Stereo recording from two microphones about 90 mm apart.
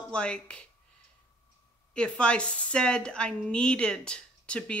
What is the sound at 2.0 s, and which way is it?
Speech, 10° left (ahead or behind).